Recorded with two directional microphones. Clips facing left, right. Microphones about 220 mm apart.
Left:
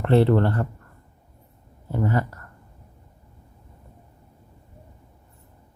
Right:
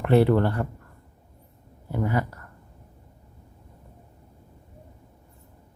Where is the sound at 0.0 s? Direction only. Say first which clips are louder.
Left 1 dB; 10° right (ahead or behind).